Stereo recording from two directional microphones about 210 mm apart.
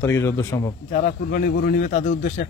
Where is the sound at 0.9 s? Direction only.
45° left (ahead or behind).